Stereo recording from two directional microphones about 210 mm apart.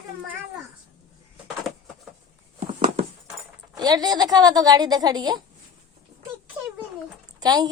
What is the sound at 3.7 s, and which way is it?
A woman's voice, 20° right (ahead or behind).